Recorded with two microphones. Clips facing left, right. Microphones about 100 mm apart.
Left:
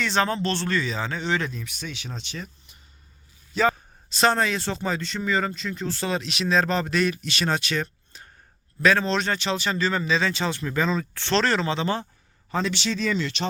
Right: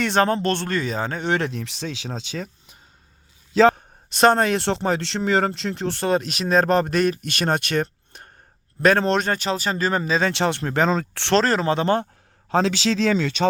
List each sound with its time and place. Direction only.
0.0 s speech: 50° right (ahead or behind); by 2.1 s 90° right
3.6 s speech: 60° right (ahead or behind); by 10.3 s 45° right (ahead or behind)
10.3 s speech: 65° right (ahead or behind)
11.3 s speech: 40° right (ahead or behind)
12.5 s a man's voice: 90° right